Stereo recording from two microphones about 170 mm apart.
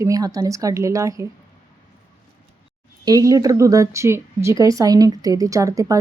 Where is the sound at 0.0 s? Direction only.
20° right (ahead or behind).